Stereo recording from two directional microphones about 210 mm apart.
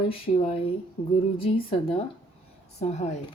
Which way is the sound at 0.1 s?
25° left (ahead or behind).